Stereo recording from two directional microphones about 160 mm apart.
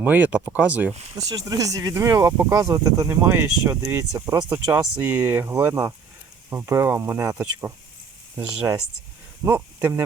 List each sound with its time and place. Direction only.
0.0 s speech: 10° right (ahead or behind)
1.5 s speech: 20° right (ahead or behind)
9.4 s speech: 15° right (ahead or behind)